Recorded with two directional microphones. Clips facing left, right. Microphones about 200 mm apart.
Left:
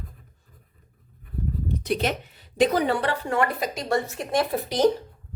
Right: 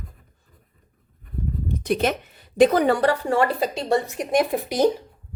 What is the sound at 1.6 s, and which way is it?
A woman's voice, 50° right (ahead or behind).